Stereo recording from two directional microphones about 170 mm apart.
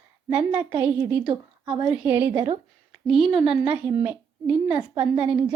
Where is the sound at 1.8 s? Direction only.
10° right (ahead or behind).